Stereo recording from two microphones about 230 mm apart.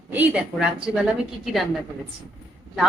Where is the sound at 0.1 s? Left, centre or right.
Centre.